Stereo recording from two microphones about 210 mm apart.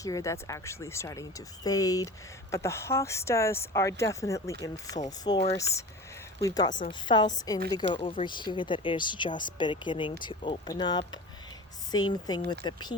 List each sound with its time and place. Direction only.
0.0 s speech: 15° left (ahead or behind)